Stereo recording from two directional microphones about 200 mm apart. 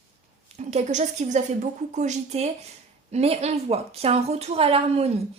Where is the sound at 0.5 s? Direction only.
35° right (ahead or behind).